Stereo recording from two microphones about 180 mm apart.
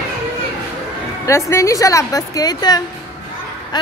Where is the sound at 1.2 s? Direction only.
15° left (ahead or behind).